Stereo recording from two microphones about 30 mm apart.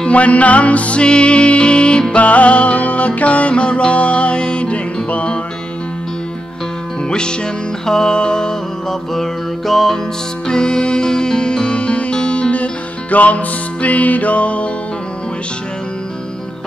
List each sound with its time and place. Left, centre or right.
0.1 s music: left
1.0 s music: left
2.1 s music: left
7.1 s music: left
9.1 s music: centre
10.4 s music: left
13.1 s music: left